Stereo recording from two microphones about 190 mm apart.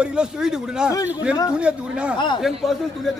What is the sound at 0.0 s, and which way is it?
A man's voice, 5° right (ahead or behind).